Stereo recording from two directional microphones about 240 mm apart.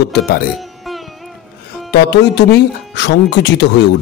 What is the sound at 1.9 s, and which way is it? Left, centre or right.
Speech, left.